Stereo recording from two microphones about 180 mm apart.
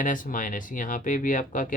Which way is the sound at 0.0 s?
50° left (ahead or behind).